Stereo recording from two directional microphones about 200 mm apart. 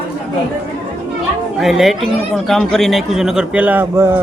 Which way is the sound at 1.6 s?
Centre (ahead or behind).